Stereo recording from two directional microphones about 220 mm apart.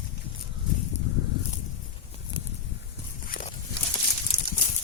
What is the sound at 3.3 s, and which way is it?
Walk, 35° left (ahead or behind).